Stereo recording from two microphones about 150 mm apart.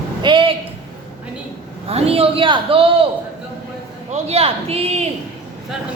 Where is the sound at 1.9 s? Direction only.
40° right (ahead or behind).